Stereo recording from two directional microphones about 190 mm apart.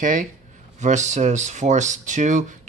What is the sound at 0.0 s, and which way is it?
Speech, 45° right (ahead or behind).